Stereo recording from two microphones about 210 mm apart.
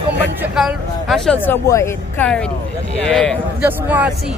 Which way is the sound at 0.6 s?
Centre (ahead or behind).